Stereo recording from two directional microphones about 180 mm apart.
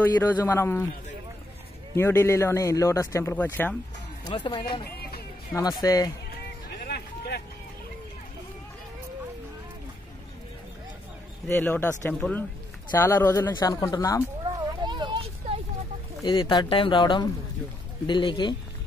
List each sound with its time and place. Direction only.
0.0 s speech: 10° left (ahead or behind)
2.0 s speech: 15° left (ahead or behind)
4.2 s speech: 25° left (ahead or behind)
6.8 s a sound: 65° left (ahead or behind)
11.4 s speech: 10° left (ahead or behind)
14.4 s a sound: 25° right (ahead or behind)
16.3 s speech: 25° left (ahead or behind)